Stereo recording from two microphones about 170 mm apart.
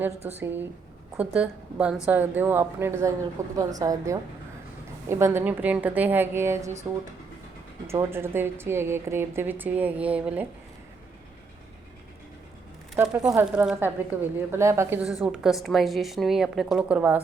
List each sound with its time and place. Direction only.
0.3 s a woman's voice: 10° right (ahead or behind)
7.9 s a woman's voice: 15° right (ahead or behind)
13.0 s a woman's voice: 5° right (ahead or behind)